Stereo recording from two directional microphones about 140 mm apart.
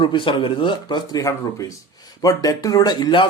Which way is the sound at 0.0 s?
35° left (ahead or behind).